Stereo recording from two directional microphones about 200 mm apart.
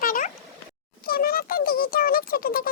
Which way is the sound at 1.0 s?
45° left (ahead or behind).